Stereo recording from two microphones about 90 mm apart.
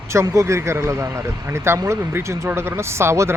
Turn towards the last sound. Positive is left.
turn(degrees=-30)  # may be behind; listen again after turning